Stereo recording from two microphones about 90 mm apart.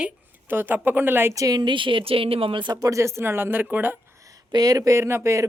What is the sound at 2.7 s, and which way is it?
A woman's voice, 40° right (ahead or behind).